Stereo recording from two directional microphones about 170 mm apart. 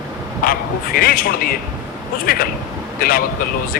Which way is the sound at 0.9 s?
60° left (ahead or behind).